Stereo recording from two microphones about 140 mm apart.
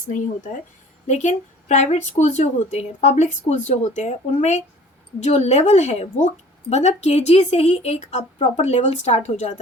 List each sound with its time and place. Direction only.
1.0 s a woman's voice: 55° left (ahead or behind)